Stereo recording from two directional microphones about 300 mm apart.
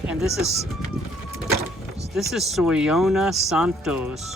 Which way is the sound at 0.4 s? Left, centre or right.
Right.